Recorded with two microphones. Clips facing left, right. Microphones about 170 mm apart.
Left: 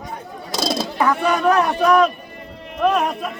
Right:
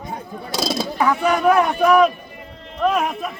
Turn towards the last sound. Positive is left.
turn(degrees=-5)  # may be behind; listen again after turning